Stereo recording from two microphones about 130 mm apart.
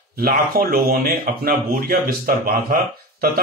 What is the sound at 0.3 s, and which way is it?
Speech, 90° right.